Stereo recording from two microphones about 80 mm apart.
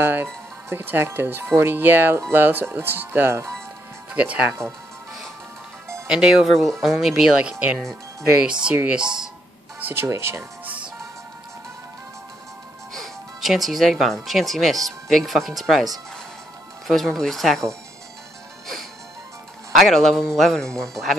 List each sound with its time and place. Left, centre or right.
0.0 s speech: right
4.1 s speech: centre
6.0 s speech: centre
8.6 s speech: centre
9.8 s music: right
10.0 s speech: right
10.6 s music: centre
12.9 s speech: centre
19.8 s speech: centre